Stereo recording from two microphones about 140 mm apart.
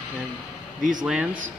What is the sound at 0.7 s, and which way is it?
Speech, 70° right (ahead or behind).